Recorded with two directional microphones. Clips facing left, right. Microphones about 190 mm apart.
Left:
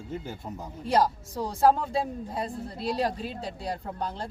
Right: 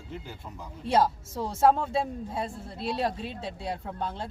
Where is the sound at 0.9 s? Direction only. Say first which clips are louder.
Even; 5° right (ahead or behind).